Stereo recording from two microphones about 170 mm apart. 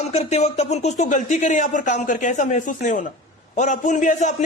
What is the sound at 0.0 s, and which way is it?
Speech, 40° left (ahead or behind).